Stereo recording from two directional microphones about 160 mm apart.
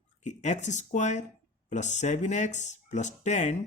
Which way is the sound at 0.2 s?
50° left (ahead or behind).